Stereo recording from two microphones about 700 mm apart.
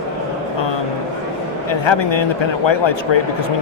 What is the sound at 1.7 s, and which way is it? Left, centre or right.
A man's voice, left.